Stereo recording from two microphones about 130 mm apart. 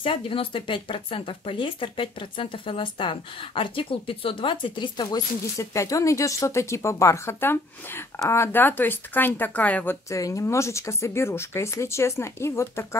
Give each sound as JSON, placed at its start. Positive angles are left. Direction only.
{"t": 0.0, "sound": "speech", "side_deg": 45}
{"t": 5.6, "sound": "speech", "side_deg": 25}
{"t": 10.0, "sound": "speech", "side_deg": 25}